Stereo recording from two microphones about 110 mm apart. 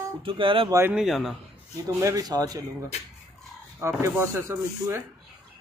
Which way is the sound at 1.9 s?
30° right (ahead or behind).